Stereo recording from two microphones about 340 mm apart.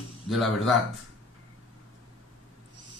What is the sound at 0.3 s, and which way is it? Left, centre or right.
Speech, centre.